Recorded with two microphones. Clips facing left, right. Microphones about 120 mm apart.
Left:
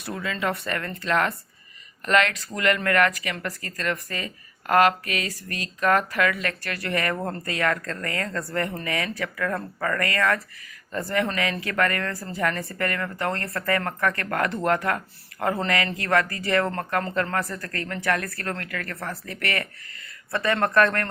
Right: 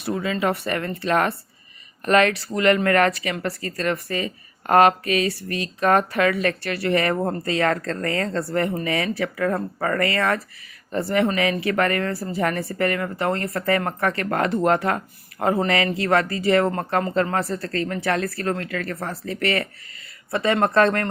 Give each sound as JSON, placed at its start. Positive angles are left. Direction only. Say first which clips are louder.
{"t": 0.0, "sound": "a woman's voice", "louder": "right 5 dB", "side_deg": -20}
{"t": 11.7, "sound": "a woman's voice", "louder": "right 4 dB", "side_deg": -20}